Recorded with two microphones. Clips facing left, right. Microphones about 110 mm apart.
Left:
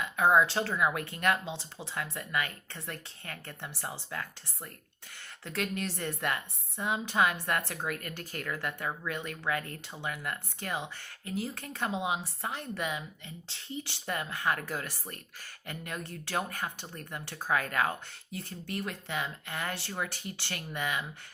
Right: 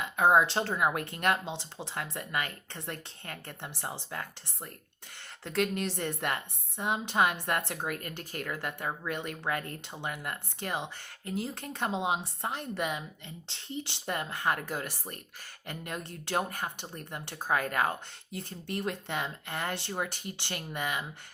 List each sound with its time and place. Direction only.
0.0 s speech: 30° right (ahead or behind)
6.7 s speech: 20° right (ahead or behind)
12.0 s a woman's voice: 55° right (ahead or behind)
12.5 s speech: 20° right (ahead or behind)
12.8 s speech: 35° right (ahead or behind); by 15.1 s 20° right (ahead or behind)
15.7 s speech: 30° right (ahead or behind)
19.7 s speech: 20° right (ahead or behind)